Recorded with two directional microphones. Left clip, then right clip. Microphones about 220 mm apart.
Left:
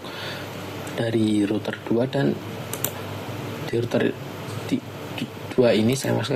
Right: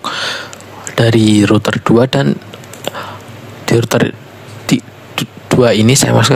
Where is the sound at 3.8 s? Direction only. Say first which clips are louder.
Right 6 dB; 50° right (ahead or behind).